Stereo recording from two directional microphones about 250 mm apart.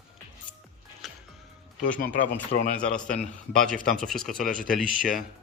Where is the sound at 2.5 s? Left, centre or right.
Left.